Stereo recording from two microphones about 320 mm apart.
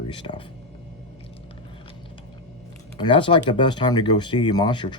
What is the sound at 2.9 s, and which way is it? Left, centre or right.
Speech, centre.